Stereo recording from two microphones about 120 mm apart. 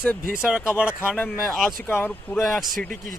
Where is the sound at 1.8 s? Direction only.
15° left (ahead or behind).